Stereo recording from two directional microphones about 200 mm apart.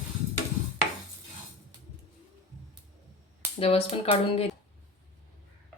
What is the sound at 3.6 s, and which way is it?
Speech, 30° left (ahead or behind).